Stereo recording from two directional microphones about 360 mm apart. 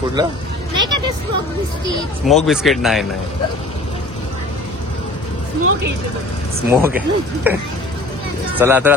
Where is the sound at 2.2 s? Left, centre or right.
Centre.